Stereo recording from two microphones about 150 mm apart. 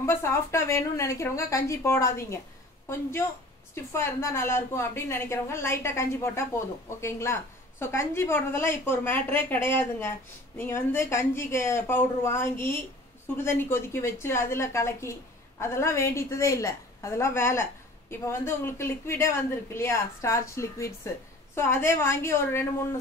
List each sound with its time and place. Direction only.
0.0 s a woman's voice: 15° left (ahead or behind)